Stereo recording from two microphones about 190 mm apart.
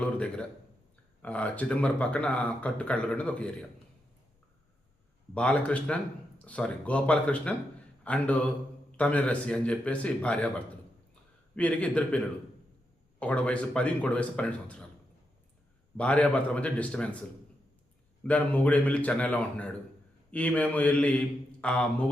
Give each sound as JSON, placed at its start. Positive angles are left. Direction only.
{"t": 0.0, "sound": "a man's voice", "side_deg": 5}
{"t": 5.3, "sound": "a man's voice", "side_deg": 5}
{"t": 11.5, "sound": "a man's voice", "side_deg": 5}
{"t": 16.0, "sound": "speech", "side_deg": 5}
{"t": 18.2, "sound": "speech", "side_deg": 5}